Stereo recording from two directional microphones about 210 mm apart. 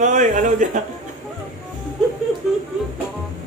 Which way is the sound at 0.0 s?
35° right (ahead or behind).